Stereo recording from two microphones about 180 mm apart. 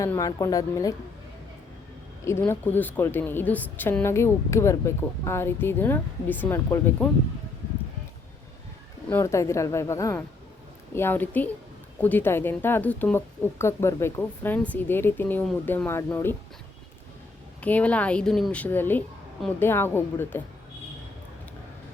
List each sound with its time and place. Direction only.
0.0 s a woman's voice: 20° left (ahead or behind)
2.2 s a woman's voice: 15° left (ahead or behind)
9.0 s a woman's voice: 15° left (ahead or behind)
17.6 s a woman's voice: 10° left (ahead or behind)